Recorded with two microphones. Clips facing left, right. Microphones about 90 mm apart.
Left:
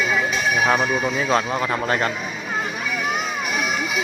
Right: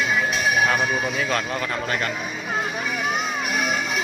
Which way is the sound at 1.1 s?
20° left (ahead or behind).